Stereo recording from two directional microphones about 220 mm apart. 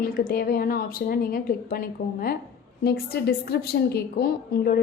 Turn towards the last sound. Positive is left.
turn(degrees=45)  # may be behind; listen again after turning